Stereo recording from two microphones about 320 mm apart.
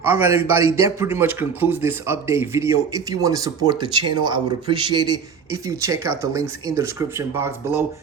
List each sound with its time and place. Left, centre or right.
0.0 s a man's voice: centre